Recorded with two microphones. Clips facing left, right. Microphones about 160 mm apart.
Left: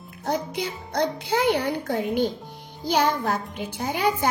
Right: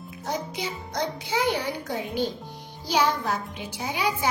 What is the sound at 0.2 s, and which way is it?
A child's voice, 55° left (ahead or behind).